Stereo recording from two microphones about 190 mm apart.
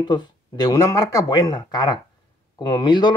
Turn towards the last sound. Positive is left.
turn(degrees=20)  # may be behind; listen again after turning